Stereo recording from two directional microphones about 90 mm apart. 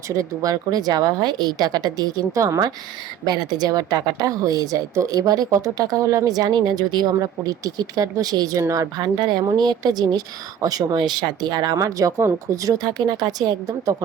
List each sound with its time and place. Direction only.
0.1 s a woman's voice: 40° right (ahead or behind)
9.0 s a woman's voice: 55° right (ahead or behind)